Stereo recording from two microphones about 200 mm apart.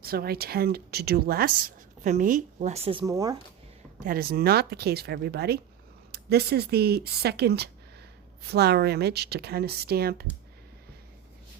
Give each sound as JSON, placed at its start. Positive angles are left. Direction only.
{"t": 0.0, "sound": "speech", "side_deg": -50}
{"t": 4.0, "sound": "speech", "side_deg": -50}